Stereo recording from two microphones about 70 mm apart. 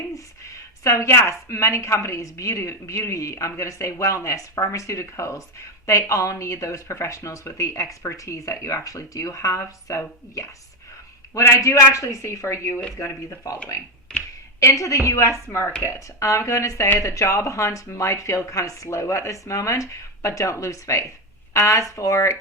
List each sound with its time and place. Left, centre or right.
0.9 s speech: left
11.3 s speech: left
13.0 s speech: left
14.6 s speech: left